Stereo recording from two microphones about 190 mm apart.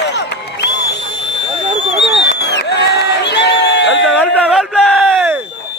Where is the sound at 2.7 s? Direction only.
60° left (ahead or behind).